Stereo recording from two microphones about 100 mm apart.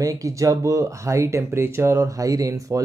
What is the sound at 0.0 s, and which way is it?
Speech, 35° right (ahead or behind).